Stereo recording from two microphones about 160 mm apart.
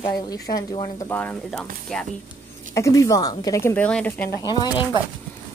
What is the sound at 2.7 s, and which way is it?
Speech, 20° left (ahead or behind).